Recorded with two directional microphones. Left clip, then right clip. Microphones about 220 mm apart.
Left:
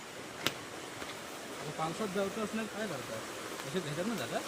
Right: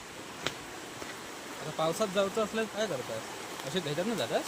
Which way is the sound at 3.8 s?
25° right (ahead or behind).